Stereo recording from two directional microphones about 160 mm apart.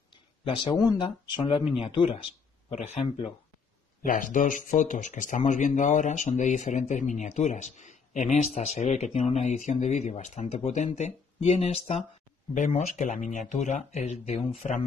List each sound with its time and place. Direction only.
0.1 s a sound: 25° left (ahead or behind)
1.0 s speech: 35° left (ahead or behind)
2.7 s speech: 45° left (ahead or behind)